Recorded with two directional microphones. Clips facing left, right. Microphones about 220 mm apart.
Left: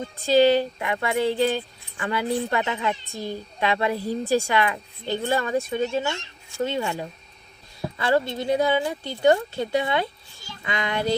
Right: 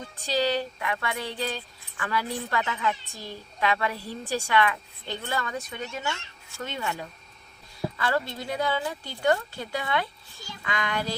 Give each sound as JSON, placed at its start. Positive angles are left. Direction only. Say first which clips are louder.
{"t": 0.0, "sound": "speech", "louder": "left 9 dB", "side_deg": 25}